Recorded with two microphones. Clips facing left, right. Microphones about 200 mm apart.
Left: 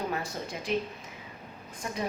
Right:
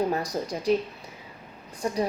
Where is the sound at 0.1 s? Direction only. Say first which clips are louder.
Right 6 dB; 40° right (ahead or behind).